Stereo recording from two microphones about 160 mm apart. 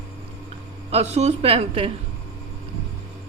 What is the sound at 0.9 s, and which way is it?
Speech, 45° right (ahead or behind).